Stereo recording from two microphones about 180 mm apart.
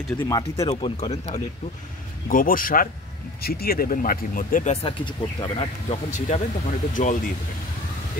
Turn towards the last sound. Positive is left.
turn(degrees=45)  # may be behind; listen again after turning